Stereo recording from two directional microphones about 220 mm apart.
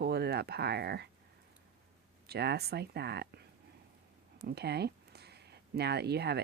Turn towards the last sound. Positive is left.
turn(degrees=-50)  # may be behind; listen again after turning